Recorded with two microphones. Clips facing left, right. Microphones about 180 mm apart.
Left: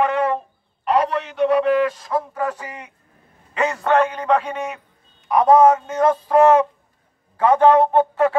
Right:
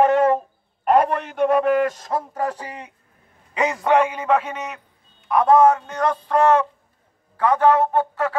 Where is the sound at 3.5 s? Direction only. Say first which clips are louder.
Even; 15° right (ahead or behind).